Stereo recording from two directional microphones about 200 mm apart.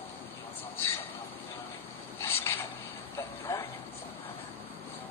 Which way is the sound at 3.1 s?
15° left (ahead or behind).